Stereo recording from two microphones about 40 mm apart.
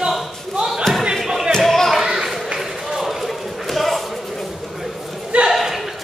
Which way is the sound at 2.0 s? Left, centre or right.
Centre.